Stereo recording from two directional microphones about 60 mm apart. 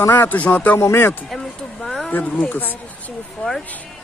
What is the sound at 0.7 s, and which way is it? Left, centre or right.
Speech, left.